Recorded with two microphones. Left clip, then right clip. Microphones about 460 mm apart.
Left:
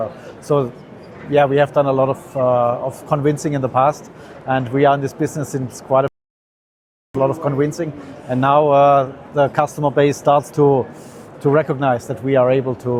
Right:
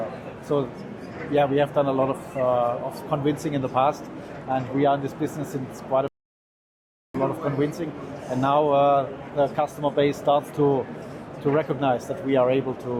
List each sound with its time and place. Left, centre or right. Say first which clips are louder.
0.5 s speech: left 7 dB; left
7.2 s speech: left 7 dB; left